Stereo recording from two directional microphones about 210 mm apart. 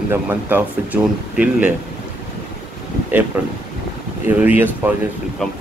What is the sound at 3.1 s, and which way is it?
Speech, 10° right (ahead or behind).